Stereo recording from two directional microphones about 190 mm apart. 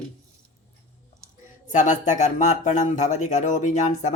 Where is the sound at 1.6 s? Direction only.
40° left (ahead or behind).